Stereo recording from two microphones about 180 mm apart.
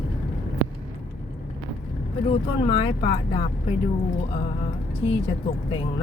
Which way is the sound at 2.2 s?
30° left (ahead or behind).